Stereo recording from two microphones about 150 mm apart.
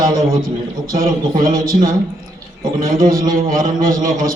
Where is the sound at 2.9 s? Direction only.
70° right (ahead or behind).